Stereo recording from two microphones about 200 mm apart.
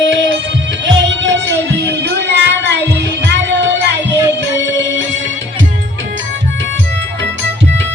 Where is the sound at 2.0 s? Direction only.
60° right (ahead or behind).